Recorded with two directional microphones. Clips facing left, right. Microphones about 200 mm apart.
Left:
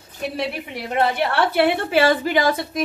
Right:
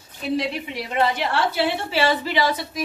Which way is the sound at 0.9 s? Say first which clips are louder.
Left 2 dB; 55° left (ahead or behind).